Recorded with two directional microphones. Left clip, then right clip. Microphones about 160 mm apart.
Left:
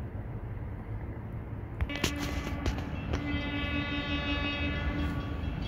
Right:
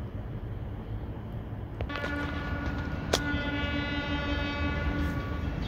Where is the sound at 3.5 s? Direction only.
15° right (ahead or behind).